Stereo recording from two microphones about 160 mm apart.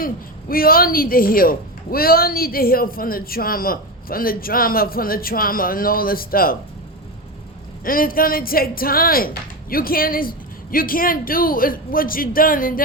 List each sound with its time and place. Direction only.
0.0 s a woman's voice: 65° left (ahead or behind)
7.9 s a woman's voice: 65° left (ahead or behind)